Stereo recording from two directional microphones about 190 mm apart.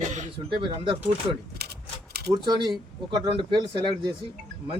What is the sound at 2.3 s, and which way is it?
Speech, 20° right (ahead or behind).